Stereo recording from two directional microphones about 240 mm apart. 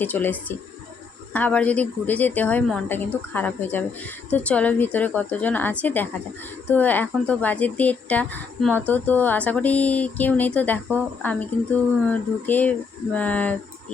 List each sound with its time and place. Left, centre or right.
0.0 s speech: centre